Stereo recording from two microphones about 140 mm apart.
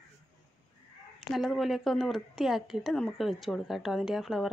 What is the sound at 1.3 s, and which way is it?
Speech, centre (ahead or behind).